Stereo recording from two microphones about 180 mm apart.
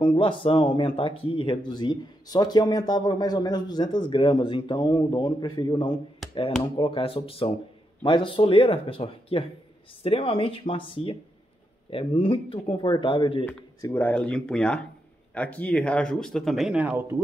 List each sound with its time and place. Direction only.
0.0 s speech: 25° left (ahead or behind)
6.2 s a sound: centre (ahead or behind)
6.8 s speech: 30° left (ahead or behind)
13.7 s speech: 15° left (ahead or behind); by 17.2 s 10° right (ahead or behind)